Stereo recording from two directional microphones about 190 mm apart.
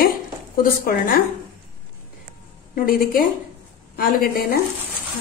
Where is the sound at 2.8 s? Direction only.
50° left (ahead or behind).